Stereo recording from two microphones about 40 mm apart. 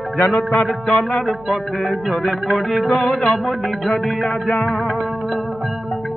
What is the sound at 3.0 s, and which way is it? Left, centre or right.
Music, centre.